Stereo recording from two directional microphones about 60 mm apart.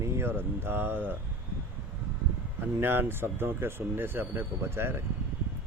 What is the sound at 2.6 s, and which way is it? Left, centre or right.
Speech, right.